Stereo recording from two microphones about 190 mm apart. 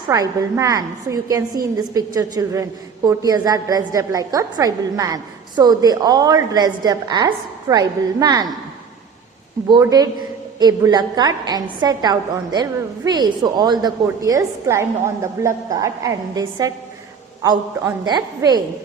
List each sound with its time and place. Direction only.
0.1 s a woman's voice: 20° right (ahead or behind)
9.6 s a woman's voice: 20° right (ahead or behind)
18.0 s a woman's voice: 20° right (ahead or behind)